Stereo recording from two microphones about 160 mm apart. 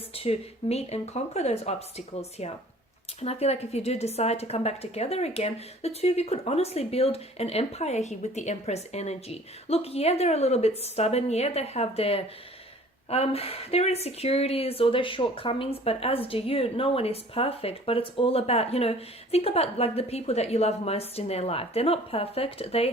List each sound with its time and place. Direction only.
0.1 s speech: 40° left (ahead or behind)